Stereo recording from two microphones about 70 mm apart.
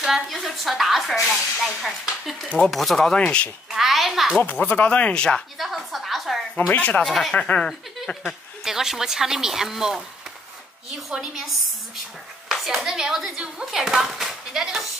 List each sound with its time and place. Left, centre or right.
0.0 s speech: centre
3.2 s speech: centre
3.7 s speech: centre
4.4 s speech: left
5.6 s a sound: centre
6.7 s speech: centre
7.1 s speech: centre
7.3 s speech: centre
8.6 s speech: centre